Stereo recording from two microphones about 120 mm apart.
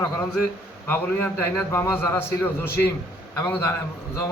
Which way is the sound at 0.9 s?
20° left (ahead or behind).